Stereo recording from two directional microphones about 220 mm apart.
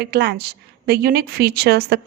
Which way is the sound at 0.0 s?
50° right (ahead or behind).